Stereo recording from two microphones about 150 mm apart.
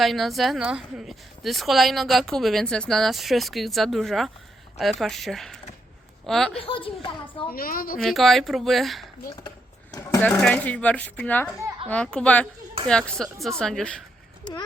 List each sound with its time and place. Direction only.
0.0 s a woman's voice: centre (ahead or behind)
6.6 s a child's voice: 40° left (ahead or behind)
7.5 s a woman's voice: 75° left (ahead or behind)
7.9 s a woman's voice: centre (ahead or behind)
9.9 s speech: 20° left (ahead or behind)
10.4 s a woman's voice: 10° left (ahead or behind)